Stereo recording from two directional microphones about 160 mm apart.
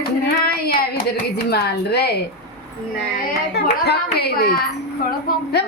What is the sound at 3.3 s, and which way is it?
Speech, 90° left.